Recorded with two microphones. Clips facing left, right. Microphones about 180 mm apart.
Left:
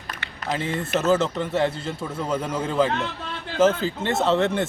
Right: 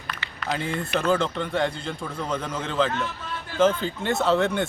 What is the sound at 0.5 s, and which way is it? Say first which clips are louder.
A man's voice: left 2 dB; centre (ahead or behind).